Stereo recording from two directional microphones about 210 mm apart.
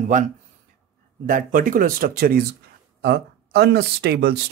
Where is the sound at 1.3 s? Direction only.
40° right (ahead or behind).